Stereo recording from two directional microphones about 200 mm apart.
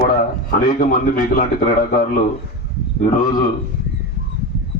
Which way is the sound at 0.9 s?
45° left (ahead or behind).